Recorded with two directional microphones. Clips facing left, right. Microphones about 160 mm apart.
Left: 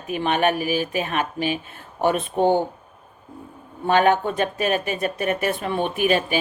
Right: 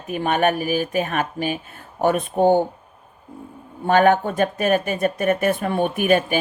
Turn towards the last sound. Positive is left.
turn(degrees=-50)  # may be behind; listen again after turning